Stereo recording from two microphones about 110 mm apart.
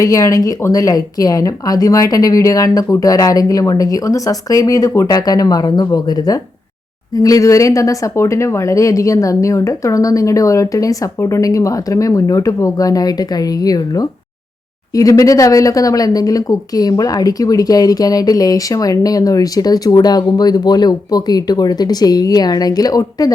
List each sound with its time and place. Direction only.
0.0 s speech: 30° left (ahead or behind)